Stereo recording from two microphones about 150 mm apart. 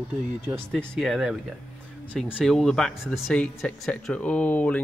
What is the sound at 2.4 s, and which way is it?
Speech, 5° left (ahead or behind).